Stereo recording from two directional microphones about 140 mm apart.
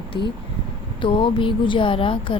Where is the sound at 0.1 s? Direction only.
30° left (ahead or behind).